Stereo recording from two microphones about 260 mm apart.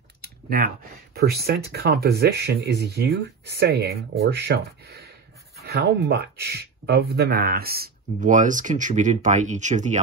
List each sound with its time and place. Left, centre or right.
0.2 s clicking: right
1.1 s speech: right